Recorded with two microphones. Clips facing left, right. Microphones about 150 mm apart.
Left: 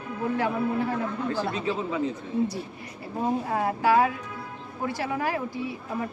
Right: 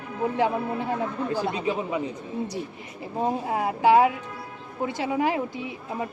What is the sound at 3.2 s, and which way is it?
A woman's voice, 20° right (ahead or behind).